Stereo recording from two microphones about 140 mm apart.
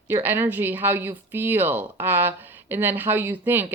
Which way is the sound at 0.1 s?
15° right (ahead or behind).